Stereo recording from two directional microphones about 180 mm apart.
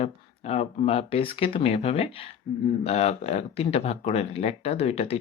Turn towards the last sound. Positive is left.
turn(degrees=35)  # may be behind; listen again after turning